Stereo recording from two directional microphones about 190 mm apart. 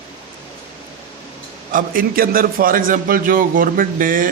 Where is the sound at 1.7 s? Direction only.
45° right (ahead or behind).